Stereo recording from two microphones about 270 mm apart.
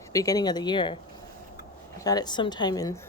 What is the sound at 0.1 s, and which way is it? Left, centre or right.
Speech, centre.